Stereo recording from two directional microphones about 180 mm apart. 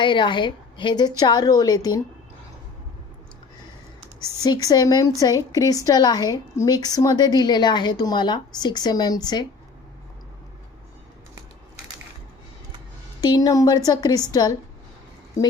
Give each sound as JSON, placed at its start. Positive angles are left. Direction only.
{"t": 0.0, "sound": "speech", "side_deg": 25}
{"t": 4.4, "sound": "speech", "side_deg": 20}
{"t": 13.2, "sound": "speech", "side_deg": 20}